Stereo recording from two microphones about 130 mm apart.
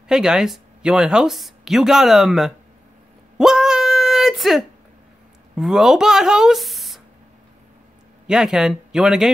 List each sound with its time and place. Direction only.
0.1 s speech: 5° right (ahead or behind)
3.3 s a sound: 5° right (ahead or behind)
5.6 s speech: centre (ahead or behind)
8.3 s speech: 5° right (ahead or behind)